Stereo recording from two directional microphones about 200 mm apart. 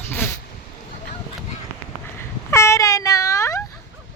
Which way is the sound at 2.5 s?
15° left (ahead or behind).